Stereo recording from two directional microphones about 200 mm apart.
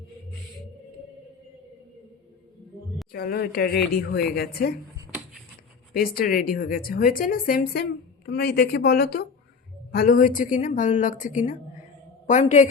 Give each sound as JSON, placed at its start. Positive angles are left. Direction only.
{"t": 3.1, "sound": "a woman's voice", "side_deg": 50}
{"t": 5.9, "sound": "a woman's voice", "side_deg": 50}